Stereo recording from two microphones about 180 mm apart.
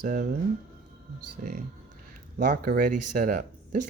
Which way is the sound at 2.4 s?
50° right (ahead or behind).